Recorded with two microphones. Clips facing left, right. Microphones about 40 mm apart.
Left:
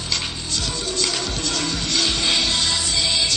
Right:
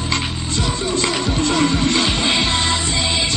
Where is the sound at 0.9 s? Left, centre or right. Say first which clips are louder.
Right 6 dB; right.